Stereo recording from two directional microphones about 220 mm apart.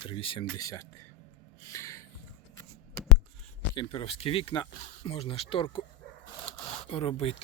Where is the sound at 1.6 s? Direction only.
15° left (ahead or behind).